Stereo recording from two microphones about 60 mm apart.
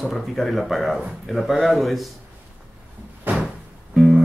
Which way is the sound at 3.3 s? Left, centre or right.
Right.